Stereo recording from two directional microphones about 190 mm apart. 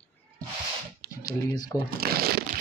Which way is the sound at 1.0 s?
60° right (ahead or behind).